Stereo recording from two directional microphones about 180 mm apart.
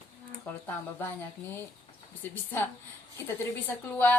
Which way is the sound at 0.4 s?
10° left (ahead or behind).